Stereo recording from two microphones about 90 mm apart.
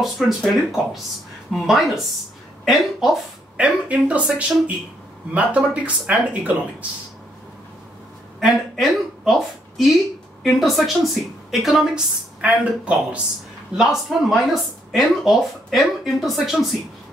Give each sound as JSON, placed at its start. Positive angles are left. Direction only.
{"t": 0.0, "sound": "speech", "side_deg": 0}
{"t": 3.5, "sound": "speech", "side_deg": -15}
{"t": 8.4, "sound": "a woman's voice", "side_deg": -5}
{"t": 13.7, "sound": "speech", "side_deg": 0}